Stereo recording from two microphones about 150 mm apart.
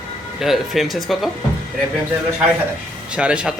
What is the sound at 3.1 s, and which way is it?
Speech, 5° right (ahead or behind).